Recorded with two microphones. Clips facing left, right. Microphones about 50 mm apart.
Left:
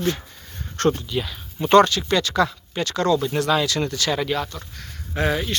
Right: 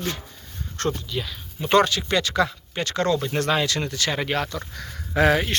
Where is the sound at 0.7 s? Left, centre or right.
Left.